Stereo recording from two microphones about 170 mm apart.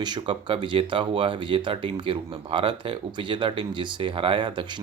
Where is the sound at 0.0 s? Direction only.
25° right (ahead or behind).